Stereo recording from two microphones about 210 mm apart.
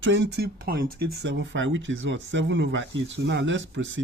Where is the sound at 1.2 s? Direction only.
60° right (ahead or behind).